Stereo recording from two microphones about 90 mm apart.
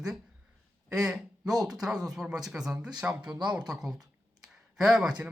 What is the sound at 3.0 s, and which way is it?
Speech, 15° right (ahead or behind).